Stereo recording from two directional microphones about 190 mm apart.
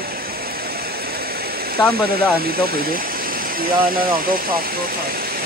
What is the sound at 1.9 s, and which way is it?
Speech, 50° right (ahead or behind).